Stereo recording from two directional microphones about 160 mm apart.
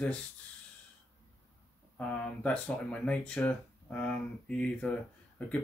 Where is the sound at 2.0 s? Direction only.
10° left (ahead or behind).